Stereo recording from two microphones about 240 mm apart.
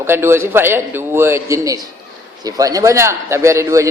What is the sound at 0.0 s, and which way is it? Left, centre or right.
A man's voice, centre.